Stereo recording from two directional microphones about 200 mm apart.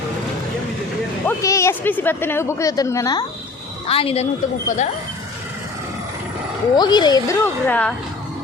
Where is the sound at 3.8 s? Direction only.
30° left (ahead or behind).